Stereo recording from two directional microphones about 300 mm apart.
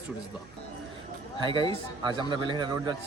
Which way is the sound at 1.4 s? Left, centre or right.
Centre.